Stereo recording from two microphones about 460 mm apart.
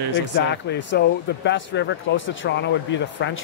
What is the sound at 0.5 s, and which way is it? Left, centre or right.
Speech, left.